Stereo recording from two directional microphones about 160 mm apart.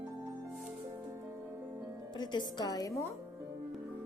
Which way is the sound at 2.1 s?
25° left (ahead or behind).